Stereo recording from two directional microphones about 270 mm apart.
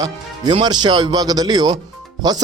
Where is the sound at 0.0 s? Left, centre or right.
Centre.